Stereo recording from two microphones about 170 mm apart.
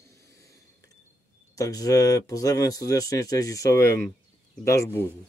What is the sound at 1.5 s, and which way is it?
Speech, 20° left (ahead or behind).